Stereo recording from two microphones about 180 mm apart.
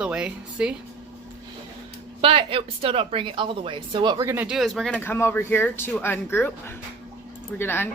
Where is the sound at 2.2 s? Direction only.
30° right (ahead or behind).